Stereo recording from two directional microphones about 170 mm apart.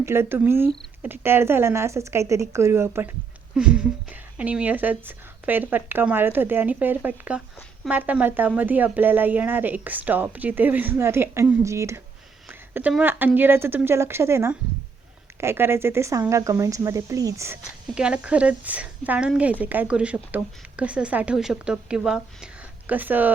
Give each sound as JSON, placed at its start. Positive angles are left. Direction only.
{"t": 0.0, "sound": "speech", "side_deg": -15}
{"t": 12.5, "sound": "a sound", "side_deg": -10}
{"t": 12.9, "sound": "speech", "side_deg": -10}
{"t": 17.9, "sound": "speech", "side_deg": -5}